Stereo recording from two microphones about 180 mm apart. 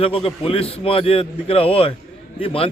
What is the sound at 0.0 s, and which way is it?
Speech, 30° left (ahead or behind).